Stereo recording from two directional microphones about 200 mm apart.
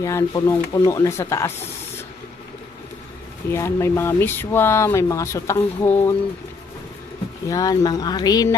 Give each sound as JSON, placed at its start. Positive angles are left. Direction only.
{"t": 0.0, "sound": "speech", "side_deg": 15}
{"t": 3.5, "sound": "speech", "side_deg": 15}
{"t": 7.4, "sound": "speech", "side_deg": 15}